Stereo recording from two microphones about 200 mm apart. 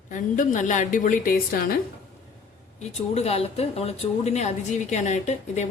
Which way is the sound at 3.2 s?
30° left (ahead or behind).